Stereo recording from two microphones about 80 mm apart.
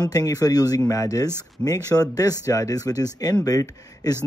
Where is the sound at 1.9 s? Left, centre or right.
Left.